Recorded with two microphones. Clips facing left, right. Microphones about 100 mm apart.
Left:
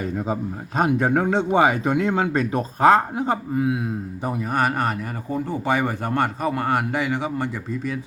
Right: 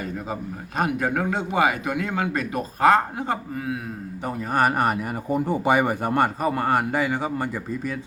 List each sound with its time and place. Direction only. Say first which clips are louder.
0.8 s speech: left 4 dB; 25° left (ahead or behind)
4.5 s a man's voice: right 3 dB; 5° right (ahead or behind)